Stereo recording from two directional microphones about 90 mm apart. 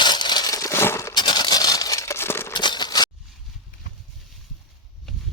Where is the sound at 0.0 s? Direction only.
55° left (ahead or behind); by 1.1 s 30° left (ahead or behind).